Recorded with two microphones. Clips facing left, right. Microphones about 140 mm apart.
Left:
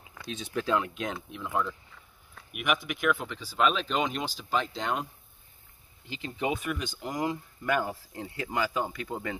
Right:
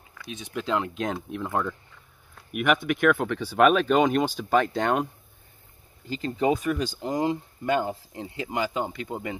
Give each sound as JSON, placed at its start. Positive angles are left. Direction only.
{"t": 0.4, "sound": "speech", "side_deg": -15}
{"t": 0.7, "sound": "speech", "side_deg": -35}
{"t": 1.3, "sound": "speech", "side_deg": -50}
{"t": 6.0, "sound": "speech", "side_deg": -40}